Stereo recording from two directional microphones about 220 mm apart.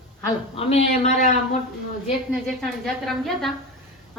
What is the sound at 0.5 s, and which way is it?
Speech, 25° left (ahead or behind).